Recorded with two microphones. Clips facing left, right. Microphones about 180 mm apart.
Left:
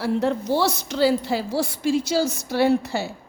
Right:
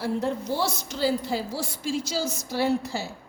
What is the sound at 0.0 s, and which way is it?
A woman's voice, 75° left (ahead or behind).